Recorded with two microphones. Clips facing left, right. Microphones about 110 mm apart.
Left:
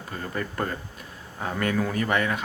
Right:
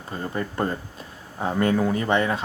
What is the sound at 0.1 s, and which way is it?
Speech, 25° right (ahead or behind).